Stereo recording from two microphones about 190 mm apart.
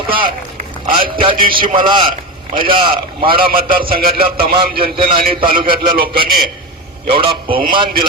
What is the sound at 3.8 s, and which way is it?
Speech, 50° right (ahead or behind).